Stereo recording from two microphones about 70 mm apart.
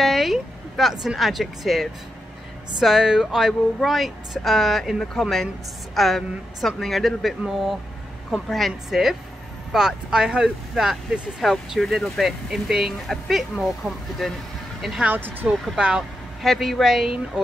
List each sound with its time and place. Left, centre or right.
0.0 s a sound: centre
1.0 s a woman's voice: centre
15.1 s speech: right
15.7 s speech: centre
16.4 s a woman's voice: centre